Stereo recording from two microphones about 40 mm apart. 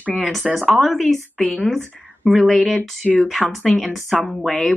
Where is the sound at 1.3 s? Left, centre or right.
Left.